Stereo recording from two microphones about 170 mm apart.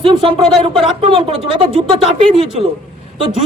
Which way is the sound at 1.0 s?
35° right (ahead or behind).